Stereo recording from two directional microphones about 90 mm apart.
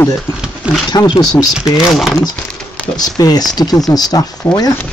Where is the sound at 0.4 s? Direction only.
10° right (ahead or behind).